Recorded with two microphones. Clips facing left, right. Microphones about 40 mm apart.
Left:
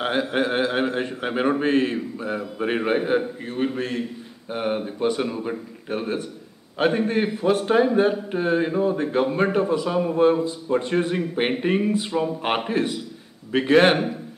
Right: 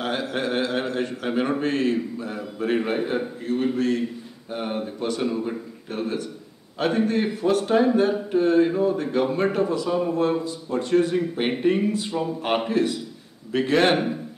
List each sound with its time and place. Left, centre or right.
0.0 s a man's voice: left